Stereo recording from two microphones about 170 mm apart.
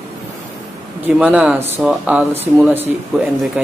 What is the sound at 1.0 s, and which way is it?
Speech, 5° right (ahead or behind).